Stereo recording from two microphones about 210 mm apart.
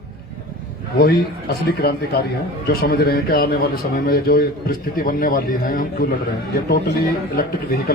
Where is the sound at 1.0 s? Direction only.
45° left (ahead or behind).